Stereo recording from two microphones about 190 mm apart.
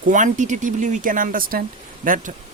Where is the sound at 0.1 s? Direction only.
40° right (ahead or behind).